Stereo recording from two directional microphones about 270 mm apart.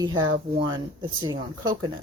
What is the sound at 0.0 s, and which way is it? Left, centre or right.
Speech, centre.